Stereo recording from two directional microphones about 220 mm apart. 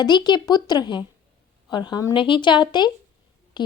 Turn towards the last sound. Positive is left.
turn(degrees=20)  # may be behind; listen again after turning